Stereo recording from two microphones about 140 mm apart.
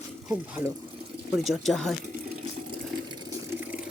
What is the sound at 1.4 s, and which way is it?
Speech, centre (ahead or behind).